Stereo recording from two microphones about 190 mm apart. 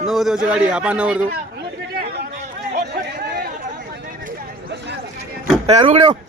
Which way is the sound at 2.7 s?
55° right (ahead or behind).